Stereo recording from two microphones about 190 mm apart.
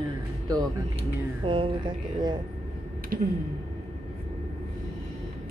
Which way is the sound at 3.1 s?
50° right (ahead or behind).